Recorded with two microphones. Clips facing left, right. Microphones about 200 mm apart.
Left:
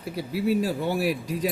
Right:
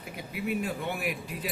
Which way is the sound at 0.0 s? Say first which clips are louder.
Left 8 dB; 35° left (ahead or behind).